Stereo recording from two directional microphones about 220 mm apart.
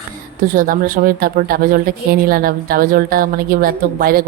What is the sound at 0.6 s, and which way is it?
A woman's voice, 40° right (ahead or behind).